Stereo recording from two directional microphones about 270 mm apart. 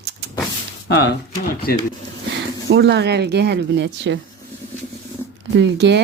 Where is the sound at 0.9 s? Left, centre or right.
Left.